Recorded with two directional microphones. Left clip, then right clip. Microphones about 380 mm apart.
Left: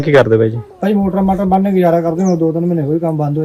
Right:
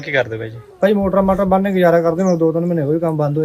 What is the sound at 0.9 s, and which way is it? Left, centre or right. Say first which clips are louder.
Speech: right 1 dB; centre.